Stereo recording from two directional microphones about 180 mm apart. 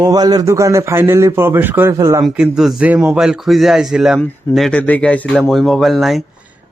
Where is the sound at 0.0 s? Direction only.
20° right (ahead or behind).